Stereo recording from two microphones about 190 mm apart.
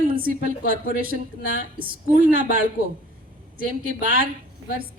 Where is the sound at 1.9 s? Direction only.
50° right (ahead or behind).